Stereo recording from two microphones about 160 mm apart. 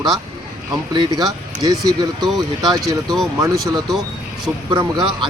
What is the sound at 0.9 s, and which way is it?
Speech, 25° right (ahead or behind).